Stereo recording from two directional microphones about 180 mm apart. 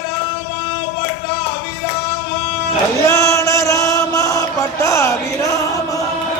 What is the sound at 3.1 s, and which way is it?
Chant, 15° left (ahead or behind).